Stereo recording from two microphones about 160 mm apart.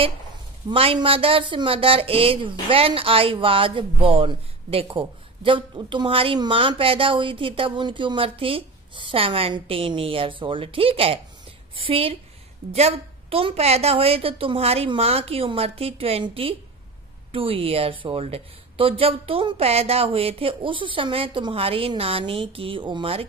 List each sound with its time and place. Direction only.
0.7 s speech: 30° right (ahead or behind)